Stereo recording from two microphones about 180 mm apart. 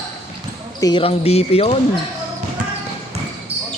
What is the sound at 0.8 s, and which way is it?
Speech, 30° left (ahead or behind).